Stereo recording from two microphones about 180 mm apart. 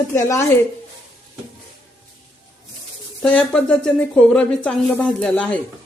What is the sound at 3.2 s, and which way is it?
A woman's voice, 5° left (ahead or behind).